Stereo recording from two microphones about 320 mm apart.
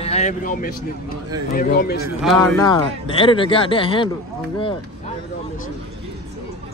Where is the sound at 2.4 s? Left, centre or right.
Centre.